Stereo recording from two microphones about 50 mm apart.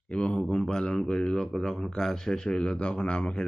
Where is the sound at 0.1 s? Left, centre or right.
Left.